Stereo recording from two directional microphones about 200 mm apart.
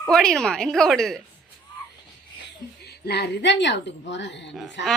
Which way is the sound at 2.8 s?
55° left (ahead or behind).